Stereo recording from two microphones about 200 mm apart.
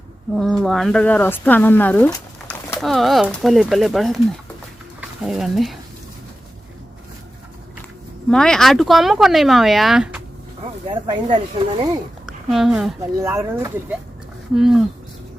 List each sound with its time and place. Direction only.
0.3 s speech: centre (ahead or behind)
8.3 s speech: 5° left (ahead or behind)
10.8 s speech: 25° right (ahead or behind)
12.2 s a sound: centre (ahead or behind)
13.1 s speech: 15° right (ahead or behind)
14.5 s speech: centre (ahead or behind)